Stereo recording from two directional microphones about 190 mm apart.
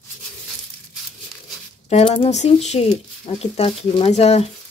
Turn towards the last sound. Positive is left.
turn(degrees=35)  # may be behind; listen again after turning